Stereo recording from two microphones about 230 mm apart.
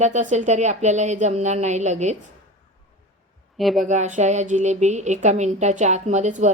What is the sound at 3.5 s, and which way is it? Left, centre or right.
Speech, centre.